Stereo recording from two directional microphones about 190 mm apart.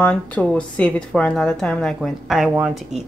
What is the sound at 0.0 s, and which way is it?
Speech, 5° left (ahead or behind).